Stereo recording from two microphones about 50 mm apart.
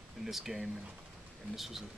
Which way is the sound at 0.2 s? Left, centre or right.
Centre.